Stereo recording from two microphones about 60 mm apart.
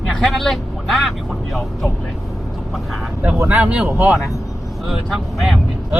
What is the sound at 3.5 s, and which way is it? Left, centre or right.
Speech, right.